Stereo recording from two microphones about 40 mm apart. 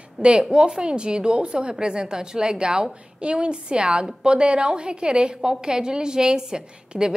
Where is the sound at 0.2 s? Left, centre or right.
Right.